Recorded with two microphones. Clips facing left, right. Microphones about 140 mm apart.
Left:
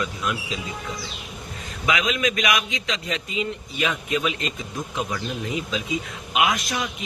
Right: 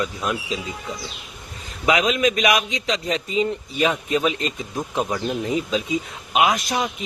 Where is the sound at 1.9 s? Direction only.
40° right (ahead or behind).